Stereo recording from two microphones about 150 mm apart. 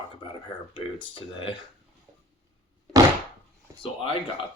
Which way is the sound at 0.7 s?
35° left (ahead or behind).